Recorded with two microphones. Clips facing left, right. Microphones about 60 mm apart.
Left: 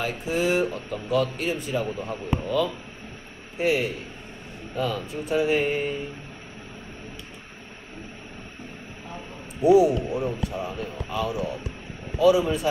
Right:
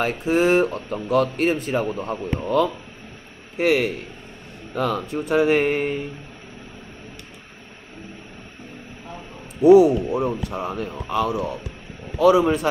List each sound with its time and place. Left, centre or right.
0.0 s speech: right
9.8 s speech: right